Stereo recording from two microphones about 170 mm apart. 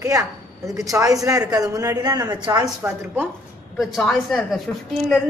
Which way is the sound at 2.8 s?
10° right (ahead or behind).